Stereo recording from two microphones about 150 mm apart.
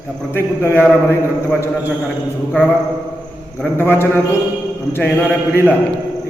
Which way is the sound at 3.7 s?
15° left (ahead or behind).